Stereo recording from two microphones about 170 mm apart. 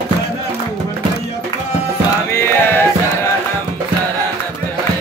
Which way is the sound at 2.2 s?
15° left (ahead or behind).